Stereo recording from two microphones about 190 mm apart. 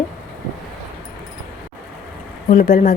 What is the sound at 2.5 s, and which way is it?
Speech, 45° left (ahead or behind).